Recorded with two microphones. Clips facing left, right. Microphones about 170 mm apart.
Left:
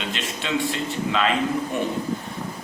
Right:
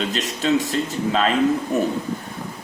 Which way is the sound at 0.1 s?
40° right (ahead or behind).